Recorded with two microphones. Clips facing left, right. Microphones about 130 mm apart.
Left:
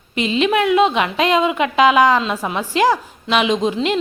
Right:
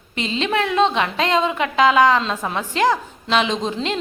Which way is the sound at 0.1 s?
15° left (ahead or behind).